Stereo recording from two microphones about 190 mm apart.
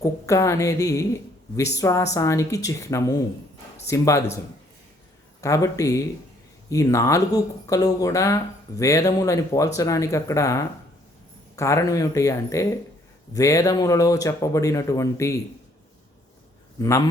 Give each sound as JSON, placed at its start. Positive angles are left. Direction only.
{"t": 0.0, "sound": "a woman's voice", "side_deg": 15}
{"t": 5.4, "sound": "a woman's voice", "side_deg": 15}